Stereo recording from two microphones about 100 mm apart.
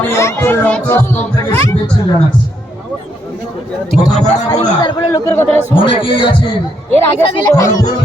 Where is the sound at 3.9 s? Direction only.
5° left (ahead or behind).